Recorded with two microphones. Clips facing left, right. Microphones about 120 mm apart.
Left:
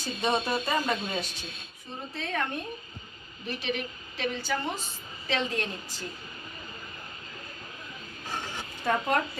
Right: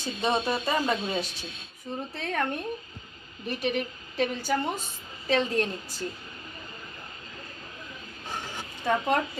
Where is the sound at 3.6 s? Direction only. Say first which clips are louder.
Right 5 dB; 50° right (ahead or behind).